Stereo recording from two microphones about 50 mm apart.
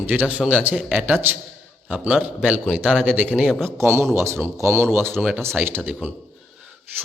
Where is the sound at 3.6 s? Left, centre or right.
Right.